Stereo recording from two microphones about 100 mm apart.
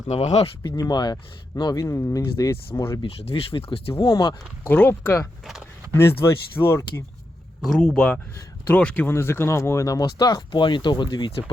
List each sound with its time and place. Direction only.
0.1 s speech: 90° left
0.8 s speech: 45° left (ahead or behind); by 3.0 s 25° left (ahead or behind)
3.2 s speech: 85° left
4.1 s speech: 45° left (ahead or behind)
4.6 s speech: 20° left (ahead or behind)
7.6 s speech: 5° left (ahead or behind); by 11.3 s 50° left (ahead or behind)